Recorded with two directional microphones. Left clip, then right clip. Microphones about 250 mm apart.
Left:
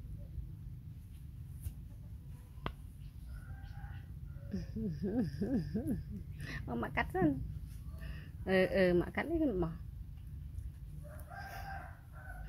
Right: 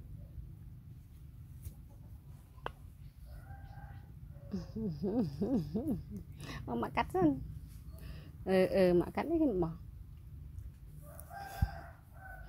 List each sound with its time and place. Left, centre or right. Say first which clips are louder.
4.5 s speech: right 1 dB; centre